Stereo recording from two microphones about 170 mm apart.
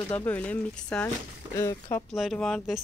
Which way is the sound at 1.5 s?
20° left (ahead or behind).